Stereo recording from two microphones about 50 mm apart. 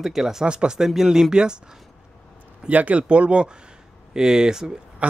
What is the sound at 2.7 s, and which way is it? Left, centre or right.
Speech, right.